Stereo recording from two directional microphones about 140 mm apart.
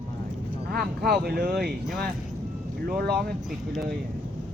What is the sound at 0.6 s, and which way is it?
Speech, 90° right.